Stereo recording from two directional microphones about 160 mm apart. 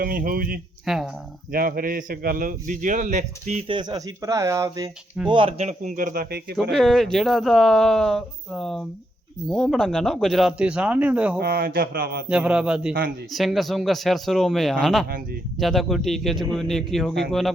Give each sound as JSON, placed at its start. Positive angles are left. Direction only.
{"t": 0.0, "sound": "a man's voice", "side_deg": -65}
{"t": 0.9, "sound": "speech", "side_deg": 0}
{"t": 1.5, "sound": "a man's voice", "side_deg": -65}
{"t": 3.7, "sound": "speech", "side_deg": -30}
{"t": 5.3, "sound": "a man's voice", "side_deg": -35}
{"t": 6.6, "sound": "speech", "side_deg": 0}
{"t": 11.3, "sound": "speech", "side_deg": -75}
{"t": 12.3, "sound": "a man's voice", "side_deg": -5}
{"t": 15.0, "sound": "speech", "side_deg": -70}
{"t": 15.5, "sound": "speech", "side_deg": 0}